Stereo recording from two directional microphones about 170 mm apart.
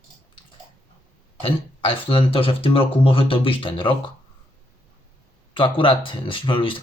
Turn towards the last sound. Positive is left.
turn(degrees=30)  # may be behind; listen again after turning